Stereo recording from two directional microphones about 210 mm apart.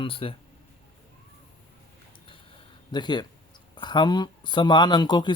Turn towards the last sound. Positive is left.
turn(degrees=20)  # may be behind; listen again after turning